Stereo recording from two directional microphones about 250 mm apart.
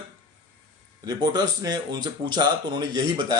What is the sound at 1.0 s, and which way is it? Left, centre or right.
Speech, centre.